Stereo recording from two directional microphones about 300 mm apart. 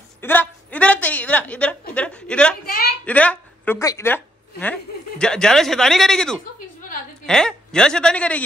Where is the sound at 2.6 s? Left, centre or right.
Left.